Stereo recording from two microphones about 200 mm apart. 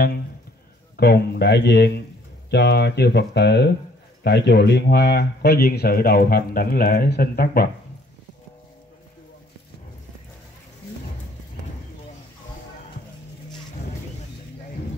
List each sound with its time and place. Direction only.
0.9 s speech: 55° left (ahead or behind)